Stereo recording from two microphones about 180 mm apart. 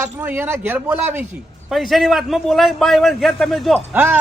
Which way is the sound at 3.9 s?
10° right (ahead or behind).